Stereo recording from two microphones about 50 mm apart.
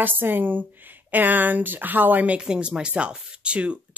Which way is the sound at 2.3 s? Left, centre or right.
Centre.